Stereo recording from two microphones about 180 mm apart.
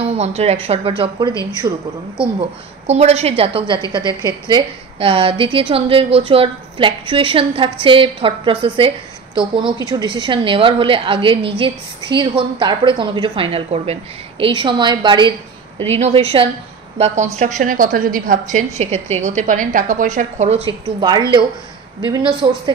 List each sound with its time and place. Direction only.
0.0 s a woman's voice: 35° right (ahead or behind)
2.9 s a woman's voice: 35° right (ahead or behind)
21.0 s a woman's voice: 25° right (ahead or behind)